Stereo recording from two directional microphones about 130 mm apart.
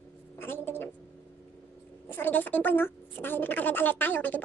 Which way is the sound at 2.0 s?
15° left (ahead or behind).